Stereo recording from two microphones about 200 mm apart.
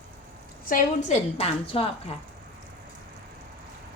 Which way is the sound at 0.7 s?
35° left (ahead or behind).